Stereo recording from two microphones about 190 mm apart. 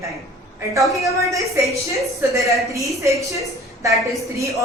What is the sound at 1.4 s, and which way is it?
A woman's voice, 15° right (ahead or behind).